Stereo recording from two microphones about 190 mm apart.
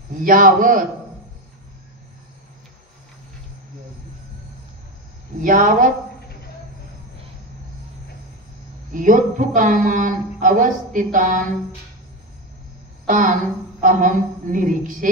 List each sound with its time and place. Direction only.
0.1 s a man's voice: 45° right (ahead or behind)
5.4 s a man's voice: 45° right (ahead or behind)
8.9 s a man's voice: 45° right (ahead or behind)
13.0 s a man's voice: 45° right (ahead or behind)